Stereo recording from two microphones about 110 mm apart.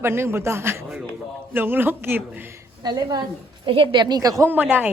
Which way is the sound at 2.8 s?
40° right (ahead or behind).